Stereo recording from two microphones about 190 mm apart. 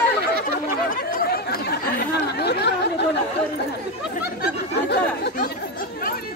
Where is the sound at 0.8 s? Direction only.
50° left (ahead or behind).